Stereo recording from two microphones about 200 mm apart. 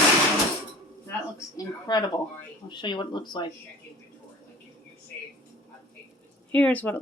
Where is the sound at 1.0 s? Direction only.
15° left (ahead or behind).